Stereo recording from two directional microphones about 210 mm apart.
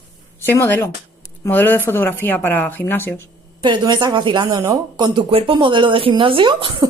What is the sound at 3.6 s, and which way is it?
Speech, 20° right (ahead or behind).